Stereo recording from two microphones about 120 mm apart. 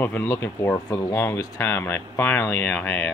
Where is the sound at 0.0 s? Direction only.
15° left (ahead or behind).